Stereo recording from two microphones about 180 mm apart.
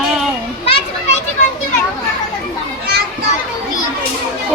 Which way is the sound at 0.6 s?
30° left (ahead or behind).